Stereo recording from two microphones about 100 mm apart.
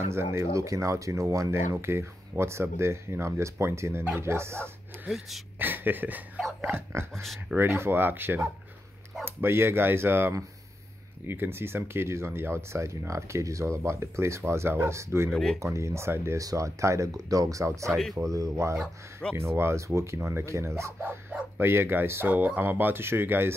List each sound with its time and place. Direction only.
0.0 s speech: 25° right (ahead or behind)
5.0 s speech: centre (ahead or behind)
5.6 s speech: 20° right (ahead or behind)
7.2 s speech: centre (ahead or behind)
7.5 s speech: 25° right (ahead or behind)
15.3 s speech: centre (ahead or behind)
15.6 s speech: 30° right (ahead or behind)